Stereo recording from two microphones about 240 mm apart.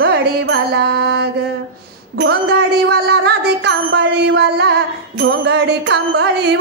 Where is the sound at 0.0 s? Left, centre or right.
Right.